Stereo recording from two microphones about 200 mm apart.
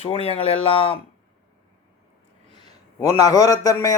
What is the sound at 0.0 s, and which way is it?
Speech, 25° left (ahead or behind).